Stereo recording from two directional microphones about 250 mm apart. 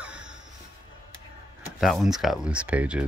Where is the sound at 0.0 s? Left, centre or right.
Centre.